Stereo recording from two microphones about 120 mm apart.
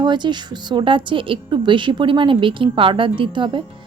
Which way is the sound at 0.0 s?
40° right (ahead or behind).